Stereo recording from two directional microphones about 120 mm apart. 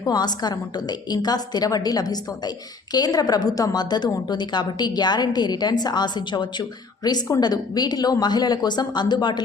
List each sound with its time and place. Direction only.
0.1 s a woman's voice: 35° left (ahead or behind)